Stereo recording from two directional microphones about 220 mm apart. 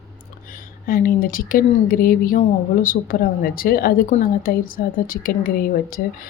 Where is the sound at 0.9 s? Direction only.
40° left (ahead or behind).